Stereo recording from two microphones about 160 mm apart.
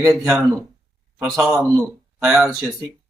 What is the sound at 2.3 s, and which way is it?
Speech, centre (ahead or behind).